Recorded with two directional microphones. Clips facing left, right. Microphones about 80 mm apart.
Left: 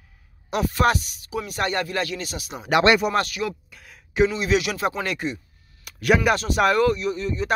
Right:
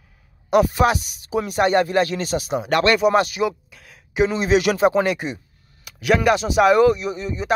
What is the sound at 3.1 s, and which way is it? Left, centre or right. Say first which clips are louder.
Speech: right 5 dB; centre.